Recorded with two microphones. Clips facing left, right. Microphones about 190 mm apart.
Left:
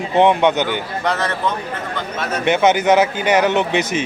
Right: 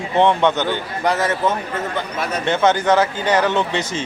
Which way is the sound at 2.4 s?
15° left (ahead or behind).